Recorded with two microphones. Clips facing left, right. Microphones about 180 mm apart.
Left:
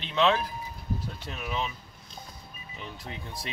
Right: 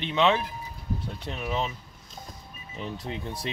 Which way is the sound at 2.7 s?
35° right (ahead or behind).